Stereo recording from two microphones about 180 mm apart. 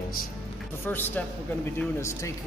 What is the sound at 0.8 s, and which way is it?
Speech, 10° left (ahead or behind).